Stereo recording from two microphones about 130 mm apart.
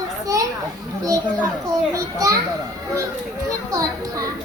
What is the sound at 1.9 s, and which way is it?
Speech, 25° right (ahead or behind).